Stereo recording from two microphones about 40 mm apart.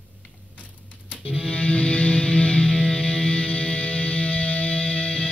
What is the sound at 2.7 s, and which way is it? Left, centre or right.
Music, centre.